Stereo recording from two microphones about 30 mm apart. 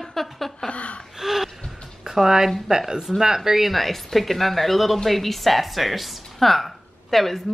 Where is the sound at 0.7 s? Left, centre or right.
Left.